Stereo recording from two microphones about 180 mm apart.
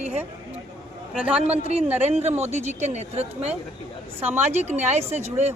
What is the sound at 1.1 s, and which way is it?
Speech, 5° right (ahead or behind).